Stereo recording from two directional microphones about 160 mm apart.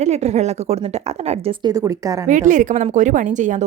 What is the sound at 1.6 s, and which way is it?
Speech, 20° right (ahead or behind).